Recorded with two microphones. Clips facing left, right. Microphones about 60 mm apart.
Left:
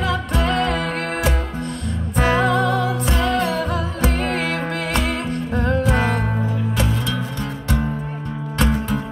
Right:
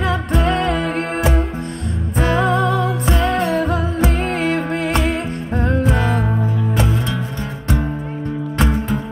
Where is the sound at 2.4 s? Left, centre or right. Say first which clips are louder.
Right 1 dB; right.